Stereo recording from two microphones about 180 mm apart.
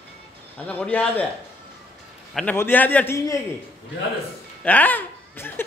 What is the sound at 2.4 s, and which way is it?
A man's voice, 10° left (ahead or behind).